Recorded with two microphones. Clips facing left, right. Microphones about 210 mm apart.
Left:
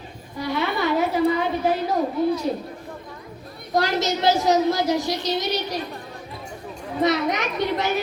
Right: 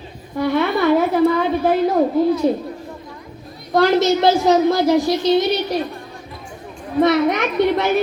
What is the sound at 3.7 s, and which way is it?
A woman's voice, 55° right (ahead or behind).